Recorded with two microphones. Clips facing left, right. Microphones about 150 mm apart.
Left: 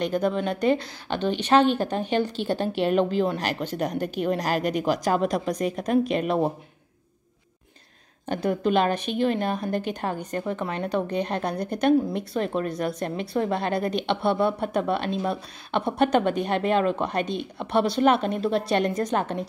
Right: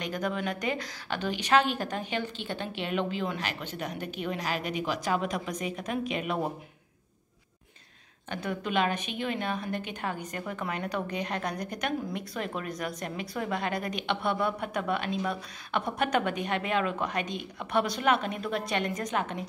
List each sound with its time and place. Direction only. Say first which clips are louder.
0.0 s a woman's voice: left 7 dB; 30° left (ahead or behind)
8.3 s a woman's voice: left 9 dB; 35° left (ahead or behind)